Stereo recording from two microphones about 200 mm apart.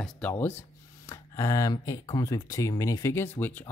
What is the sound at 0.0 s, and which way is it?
Speech, 10° left (ahead or behind).